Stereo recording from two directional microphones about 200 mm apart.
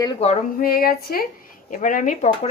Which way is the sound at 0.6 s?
45° left (ahead or behind).